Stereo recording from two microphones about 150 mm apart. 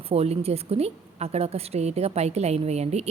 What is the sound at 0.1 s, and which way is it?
A woman's voice, 40° right (ahead or behind).